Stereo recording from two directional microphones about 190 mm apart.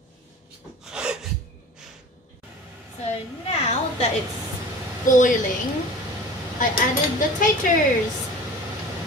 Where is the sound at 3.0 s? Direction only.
35° left (ahead or behind).